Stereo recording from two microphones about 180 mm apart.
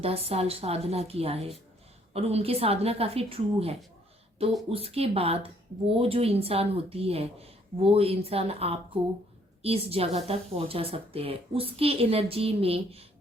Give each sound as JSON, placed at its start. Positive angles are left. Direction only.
{"t": 0.0, "sound": "a woman's voice", "side_deg": -35}